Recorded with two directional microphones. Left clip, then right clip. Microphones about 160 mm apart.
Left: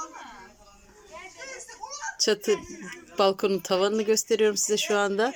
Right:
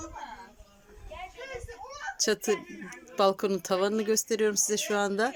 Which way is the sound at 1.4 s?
55° right (ahead or behind).